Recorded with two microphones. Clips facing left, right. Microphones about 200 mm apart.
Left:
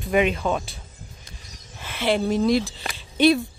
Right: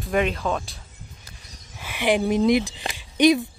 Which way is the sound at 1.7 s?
10° right (ahead or behind).